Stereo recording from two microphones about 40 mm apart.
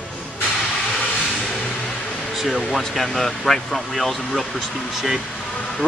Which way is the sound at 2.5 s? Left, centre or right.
Centre.